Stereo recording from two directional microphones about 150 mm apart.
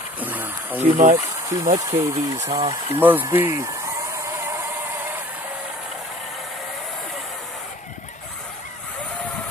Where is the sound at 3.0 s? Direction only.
15° right (ahead or behind).